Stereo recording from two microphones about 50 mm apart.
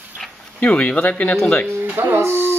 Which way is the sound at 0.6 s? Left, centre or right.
Left.